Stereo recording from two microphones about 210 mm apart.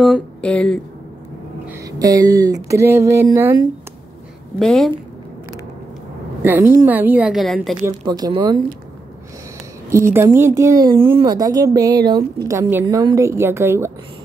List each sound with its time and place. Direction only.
0.0 s speech: 5° left (ahead or behind)
1.9 s a woman's voice: 15° right (ahead or behind)
4.6 s a woman's voice: centre (ahead or behind)
6.4 s a woman's voice: 10° right (ahead or behind)
8.1 s speech: 20° right (ahead or behind)
9.8 s a woman's voice: 15° right (ahead or behind)